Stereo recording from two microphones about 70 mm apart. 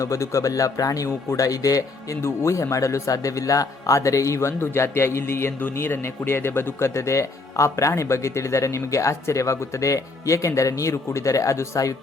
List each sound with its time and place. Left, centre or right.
0.0 s speech: left